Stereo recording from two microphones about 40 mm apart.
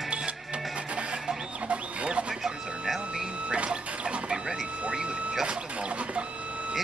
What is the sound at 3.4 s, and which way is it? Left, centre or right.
Vehicle, right.